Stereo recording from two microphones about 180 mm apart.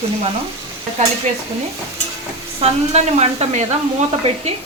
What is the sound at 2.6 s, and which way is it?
Speech, 35° right (ahead or behind).